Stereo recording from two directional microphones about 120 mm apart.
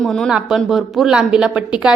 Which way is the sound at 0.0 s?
Centre (ahead or behind).